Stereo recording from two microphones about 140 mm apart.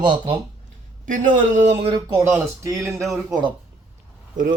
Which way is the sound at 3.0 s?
Centre (ahead or behind).